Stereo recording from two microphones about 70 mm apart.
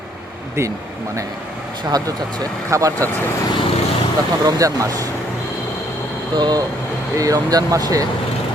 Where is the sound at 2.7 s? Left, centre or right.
Right.